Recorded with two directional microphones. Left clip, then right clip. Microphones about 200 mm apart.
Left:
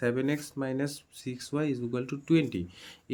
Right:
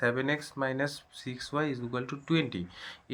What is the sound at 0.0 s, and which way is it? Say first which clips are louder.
Speech: right 1 dB; 35° left (ahead or behind).